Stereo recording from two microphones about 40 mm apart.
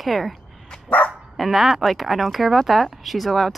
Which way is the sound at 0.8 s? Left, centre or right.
Left.